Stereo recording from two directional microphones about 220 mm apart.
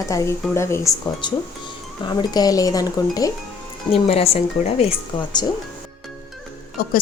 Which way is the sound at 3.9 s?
25° left (ahead or behind).